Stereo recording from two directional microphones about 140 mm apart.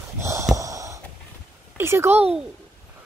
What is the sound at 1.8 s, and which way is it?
Speech, 20° right (ahead or behind).